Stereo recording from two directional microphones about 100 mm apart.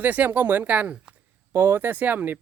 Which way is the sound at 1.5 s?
25° right (ahead or behind).